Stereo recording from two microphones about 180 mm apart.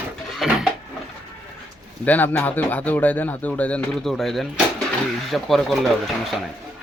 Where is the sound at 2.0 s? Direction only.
10° left (ahead or behind).